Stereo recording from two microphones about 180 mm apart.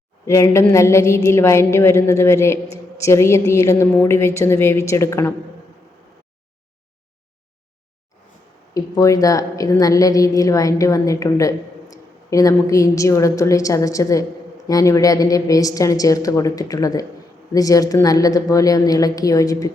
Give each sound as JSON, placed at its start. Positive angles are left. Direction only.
{"t": 0.3, "sound": "a woman's voice", "side_deg": 15}
{"t": 8.7, "sound": "a woman's voice", "side_deg": 20}